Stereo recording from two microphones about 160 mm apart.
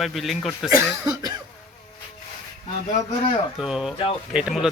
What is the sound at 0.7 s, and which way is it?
Speech, 20° right (ahead or behind).